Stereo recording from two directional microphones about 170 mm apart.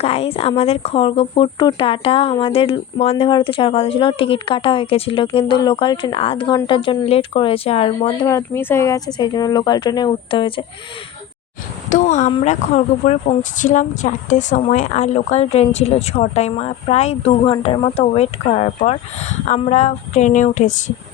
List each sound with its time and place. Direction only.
0.0 s speech: 35° left (ahead or behind)
8.3 s speech: 15° left (ahead or behind)
11.9 s speech: 45° left (ahead or behind)